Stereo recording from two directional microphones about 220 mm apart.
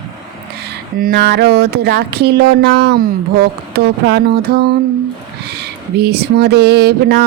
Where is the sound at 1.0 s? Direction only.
45° right (ahead or behind).